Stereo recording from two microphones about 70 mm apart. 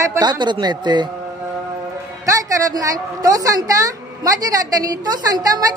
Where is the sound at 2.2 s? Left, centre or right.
Right.